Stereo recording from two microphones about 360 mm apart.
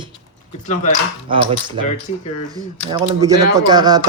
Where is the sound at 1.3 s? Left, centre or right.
Centre.